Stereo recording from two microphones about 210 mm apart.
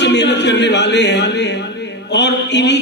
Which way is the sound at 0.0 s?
55° left (ahead or behind).